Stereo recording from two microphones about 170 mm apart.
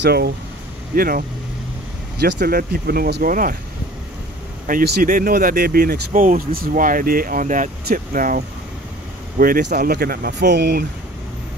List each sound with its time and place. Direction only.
0.0 s speech: 70° right (ahead or behind)
0.9 s speech: 60° right (ahead or behind)
2.1 s speech: 75° right (ahead or behind); by 3.5 s 55° right (ahead or behind)
4.6 s speech: 55° right (ahead or behind); by 10.9 s 70° right (ahead or behind)